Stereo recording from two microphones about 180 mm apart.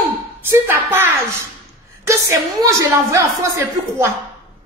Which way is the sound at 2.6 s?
15° right (ahead or behind).